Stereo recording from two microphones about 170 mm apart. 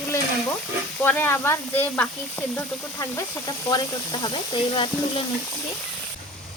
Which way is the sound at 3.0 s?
20° left (ahead or behind).